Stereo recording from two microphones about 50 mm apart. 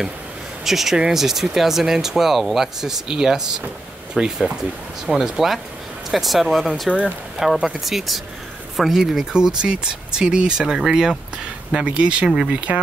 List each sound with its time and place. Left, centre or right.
0.7 s speech: centre
6.9 s speech: right
7.4 s speech: centre